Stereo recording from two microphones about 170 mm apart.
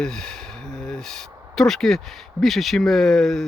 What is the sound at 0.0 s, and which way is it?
Speech, 5° left (ahead or behind).